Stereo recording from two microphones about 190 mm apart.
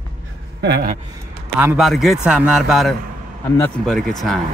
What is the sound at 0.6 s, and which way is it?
Speech, 60° right (ahead or behind).